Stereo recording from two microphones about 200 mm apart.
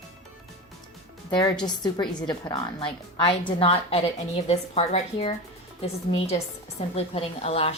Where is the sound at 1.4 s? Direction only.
20° left (ahead or behind).